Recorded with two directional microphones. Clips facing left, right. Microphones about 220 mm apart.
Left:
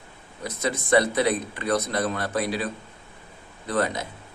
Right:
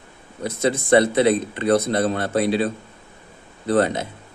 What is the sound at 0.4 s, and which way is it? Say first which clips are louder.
Speech: right 7 dB; 30° right (ahead or behind).